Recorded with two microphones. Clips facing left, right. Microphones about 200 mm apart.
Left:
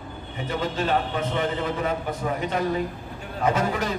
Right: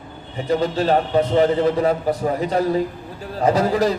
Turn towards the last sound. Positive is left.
turn(degrees=-35)  # may be behind; listen again after turning